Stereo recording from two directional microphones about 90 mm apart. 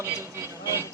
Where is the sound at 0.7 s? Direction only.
35° left (ahead or behind).